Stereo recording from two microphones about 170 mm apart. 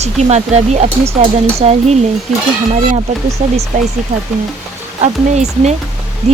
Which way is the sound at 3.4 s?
45° right (ahead or behind).